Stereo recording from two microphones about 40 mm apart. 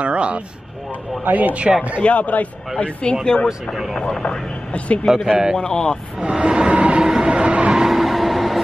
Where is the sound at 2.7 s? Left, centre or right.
Left.